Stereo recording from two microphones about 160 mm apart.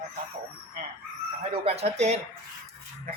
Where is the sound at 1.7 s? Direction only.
40° right (ahead or behind).